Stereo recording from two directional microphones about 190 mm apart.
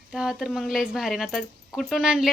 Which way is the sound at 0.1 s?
5° right (ahead or behind).